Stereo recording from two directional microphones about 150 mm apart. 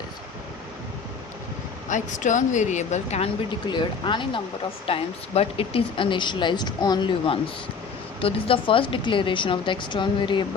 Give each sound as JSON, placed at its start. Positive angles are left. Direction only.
{"t": 1.9, "sound": "a woman's voice", "side_deg": 55}
{"t": 3.7, "sound": "speech", "side_deg": 30}